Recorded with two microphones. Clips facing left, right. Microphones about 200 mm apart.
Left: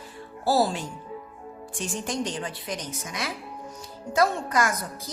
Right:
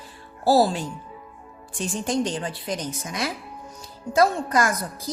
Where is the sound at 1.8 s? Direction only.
30° right (ahead or behind).